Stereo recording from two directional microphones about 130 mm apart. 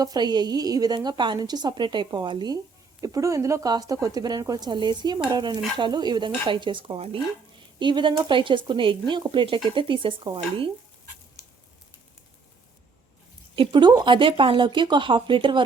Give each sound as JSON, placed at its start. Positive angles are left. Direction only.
{"t": 0.0, "sound": "a woman's voice", "side_deg": -30}
{"t": 3.0, "sound": "a woman's voice", "side_deg": -25}
{"t": 13.6, "sound": "a woman's voice", "side_deg": -35}